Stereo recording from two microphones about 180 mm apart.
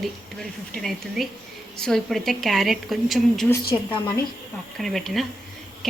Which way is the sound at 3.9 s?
25° left (ahead or behind).